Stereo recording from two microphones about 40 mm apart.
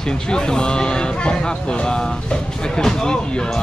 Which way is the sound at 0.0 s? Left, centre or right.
Centre.